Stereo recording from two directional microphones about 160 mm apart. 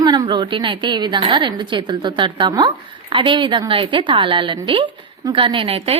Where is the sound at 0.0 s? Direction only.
25° right (ahead or behind).